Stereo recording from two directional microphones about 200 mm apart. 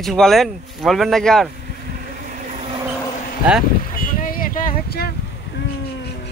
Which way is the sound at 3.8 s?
45° left (ahead or behind).